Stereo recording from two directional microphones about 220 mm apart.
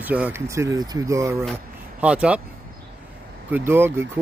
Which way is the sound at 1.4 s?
Centre (ahead or behind).